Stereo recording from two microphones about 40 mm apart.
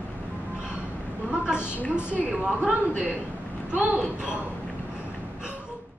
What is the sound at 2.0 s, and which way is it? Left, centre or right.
Speech, right.